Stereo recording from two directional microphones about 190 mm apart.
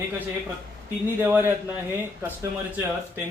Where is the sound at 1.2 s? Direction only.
10° right (ahead or behind).